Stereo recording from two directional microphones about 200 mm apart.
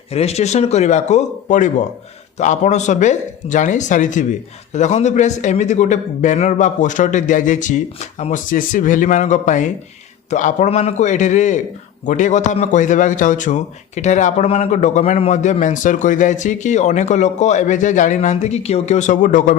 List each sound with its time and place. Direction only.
0.1 s a man's voice: 30° left (ahead or behind)